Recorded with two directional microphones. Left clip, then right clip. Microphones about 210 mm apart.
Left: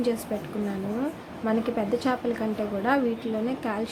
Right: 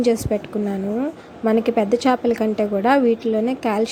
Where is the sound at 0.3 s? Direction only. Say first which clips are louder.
Right 9 dB; 35° right (ahead or behind).